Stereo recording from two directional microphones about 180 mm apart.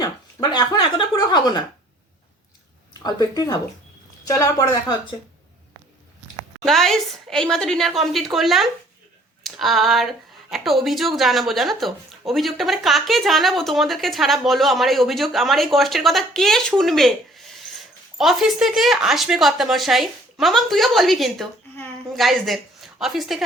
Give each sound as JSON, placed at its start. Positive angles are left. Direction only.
{"t": 0.0, "sound": "speech", "side_deg": 25}
{"t": 3.0, "sound": "speech", "side_deg": 20}
{"t": 6.6, "sound": "a woman's voice", "side_deg": 0}